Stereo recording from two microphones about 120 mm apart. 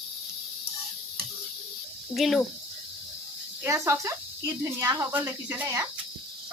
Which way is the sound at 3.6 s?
25° right (ahead or behind).